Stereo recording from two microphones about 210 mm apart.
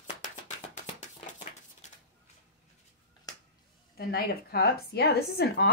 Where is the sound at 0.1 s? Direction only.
35° left (ahead or behind).